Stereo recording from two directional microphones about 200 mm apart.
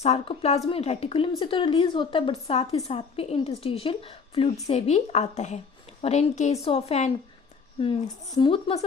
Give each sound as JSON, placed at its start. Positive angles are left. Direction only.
{"t": 0.0, "sound": "a woman's voice", "side_deg": 30}